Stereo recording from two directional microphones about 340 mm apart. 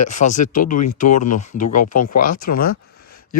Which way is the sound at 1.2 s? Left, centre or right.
Left.